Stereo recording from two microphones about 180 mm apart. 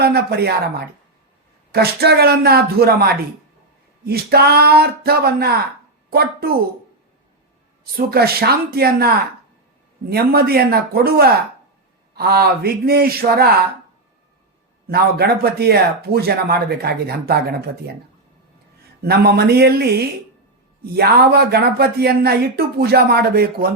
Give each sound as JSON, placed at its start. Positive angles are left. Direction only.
{"t": 0.0, "sound": "speech", "side_deg": -65}
{"t": 7.9, "sound": "speech", "side_deg": -60}
{"t": 14.8, "sound": "speech", "side_deg": -60}
{"t": 19.0, "sound": "speech", "side_deg": -60}